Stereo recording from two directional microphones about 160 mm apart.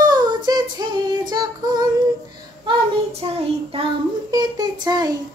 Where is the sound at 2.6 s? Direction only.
40° right (ahead or behind).